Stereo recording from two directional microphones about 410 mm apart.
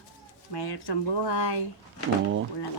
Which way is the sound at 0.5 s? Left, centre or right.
Left.